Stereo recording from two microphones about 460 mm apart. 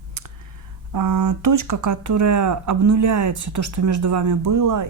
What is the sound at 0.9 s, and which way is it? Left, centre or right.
Speech, right.